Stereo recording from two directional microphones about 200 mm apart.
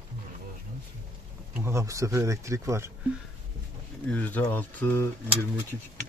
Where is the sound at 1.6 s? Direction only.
15° right (ahead or behind).